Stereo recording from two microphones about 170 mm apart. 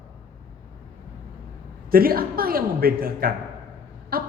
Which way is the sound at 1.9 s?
60° right (ahead or behind).